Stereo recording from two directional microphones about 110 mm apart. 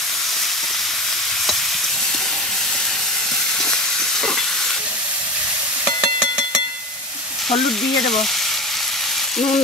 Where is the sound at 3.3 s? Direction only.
5° left (ahead or behind).